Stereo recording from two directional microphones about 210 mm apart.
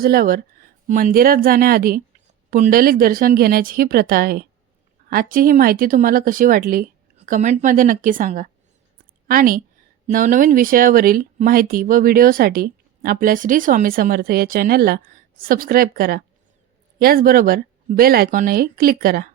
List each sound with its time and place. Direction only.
0.0 s a woman's voice: 45° right (ahead or behind)